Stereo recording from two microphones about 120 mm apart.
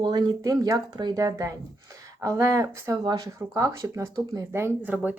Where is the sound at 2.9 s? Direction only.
35° right (ahead or behind).